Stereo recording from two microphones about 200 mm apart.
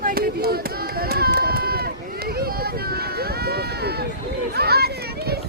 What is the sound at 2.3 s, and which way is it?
Speech, 50° right (ahead or behind).